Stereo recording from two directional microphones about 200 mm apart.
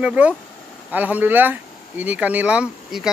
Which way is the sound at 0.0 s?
5° right (ahead or behind).